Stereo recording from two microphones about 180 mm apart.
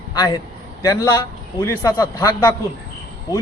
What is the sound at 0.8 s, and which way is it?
A man's voice, 20° left (ahead or behind).